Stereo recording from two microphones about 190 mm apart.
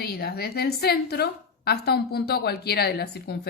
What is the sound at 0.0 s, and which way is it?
A woman's voice, 55° left (ahead or behind).